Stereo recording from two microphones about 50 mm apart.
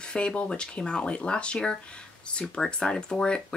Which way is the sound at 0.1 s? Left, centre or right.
Centre.